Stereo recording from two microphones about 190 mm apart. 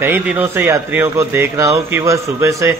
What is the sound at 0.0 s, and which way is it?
A man's voice, 10° right (ahead or behind).